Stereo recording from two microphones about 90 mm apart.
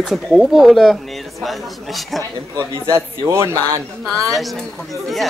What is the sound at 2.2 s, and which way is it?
Speech, 35° right (ahead or behind).